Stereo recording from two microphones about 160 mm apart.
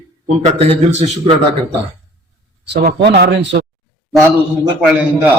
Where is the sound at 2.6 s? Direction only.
90° right.